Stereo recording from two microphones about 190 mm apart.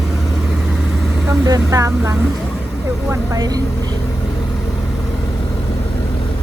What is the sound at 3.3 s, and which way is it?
Speech, 20° right (ahead or behind).